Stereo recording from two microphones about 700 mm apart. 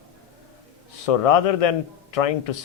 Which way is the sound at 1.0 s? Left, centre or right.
Left.